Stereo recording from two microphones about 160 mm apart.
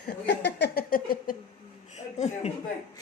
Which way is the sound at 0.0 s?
90° left.